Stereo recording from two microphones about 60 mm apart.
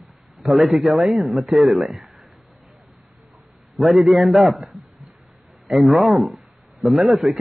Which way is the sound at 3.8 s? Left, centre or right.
Centre.